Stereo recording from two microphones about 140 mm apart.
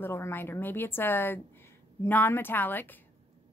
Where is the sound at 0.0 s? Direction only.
15° left (ahead or behind).